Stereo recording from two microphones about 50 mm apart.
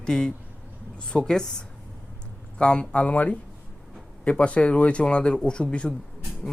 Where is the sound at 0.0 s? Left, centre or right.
Centre.